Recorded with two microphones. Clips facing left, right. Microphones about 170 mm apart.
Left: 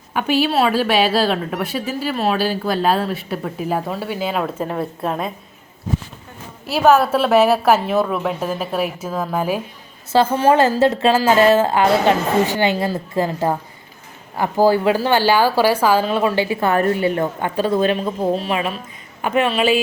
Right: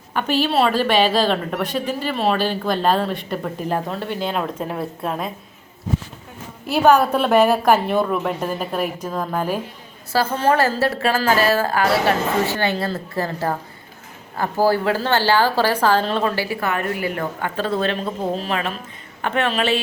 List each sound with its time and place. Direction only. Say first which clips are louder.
0.1 s a woman's voice: left 2 dB; 10° left (ahead or behind)
6.7 s a woman's voice: left 1 dB; centre (ahead or behind)
10.1 s a woman's voice: left 4 dB; 20° left (ahead or behind)
16.3 s a woman's voice: left 5 dB; 20° left (ahead or behind)
16.7 s a woman's voice: left 6 dB; 35° left (ahead or behind)
17.6 s speech: left 5 dB; 15° left (ahead or behind)